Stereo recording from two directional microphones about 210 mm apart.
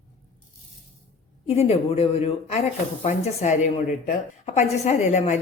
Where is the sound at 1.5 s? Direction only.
30° left (ahead or behind).